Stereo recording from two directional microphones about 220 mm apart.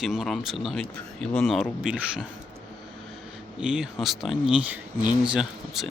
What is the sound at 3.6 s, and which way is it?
Speech, 5° right (ahead or behind).